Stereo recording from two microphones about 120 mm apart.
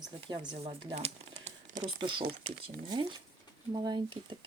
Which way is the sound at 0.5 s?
55° right (ahead or behind).